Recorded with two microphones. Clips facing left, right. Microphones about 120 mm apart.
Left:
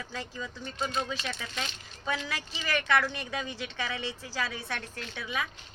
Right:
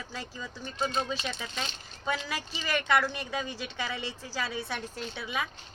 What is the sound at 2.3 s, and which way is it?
A woman's voice, 5° right (ahead or behind).